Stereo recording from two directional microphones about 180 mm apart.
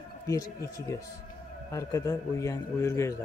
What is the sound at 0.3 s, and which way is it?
A man's voice, 20° left (ahead or behind).